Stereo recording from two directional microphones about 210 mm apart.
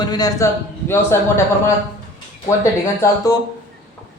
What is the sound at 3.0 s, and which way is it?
Speech, 15° left (ahead or behind).